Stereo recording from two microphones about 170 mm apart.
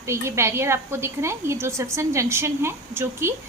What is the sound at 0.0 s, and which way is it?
A woman's voice, 15° right (ahead or behind).